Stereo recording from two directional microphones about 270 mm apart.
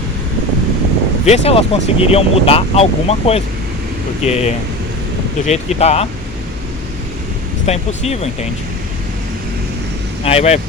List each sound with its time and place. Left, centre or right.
1.2 s speech: left
7.7 s speech: left
10.2 s speech: left